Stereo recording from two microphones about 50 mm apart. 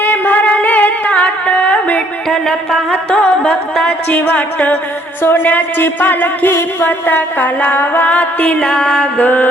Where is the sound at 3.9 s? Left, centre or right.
Left.